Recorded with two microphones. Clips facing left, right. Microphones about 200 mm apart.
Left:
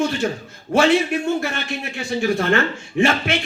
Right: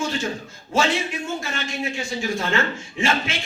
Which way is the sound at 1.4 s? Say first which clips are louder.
Left 2 dB; 65° left (ahead or behind).